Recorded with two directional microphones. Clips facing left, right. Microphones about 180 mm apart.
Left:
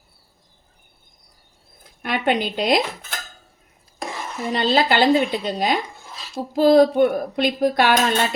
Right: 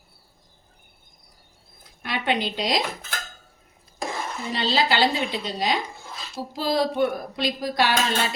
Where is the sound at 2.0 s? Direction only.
50° left (ahead or behind).